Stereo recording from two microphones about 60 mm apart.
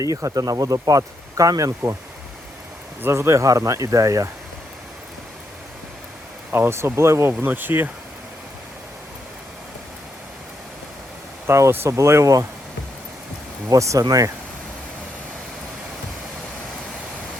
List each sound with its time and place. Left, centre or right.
0.0 s speech: right
3.0 s speech: right
6.5 s speech: right
11.4 s speech: right
13.7 s speech: right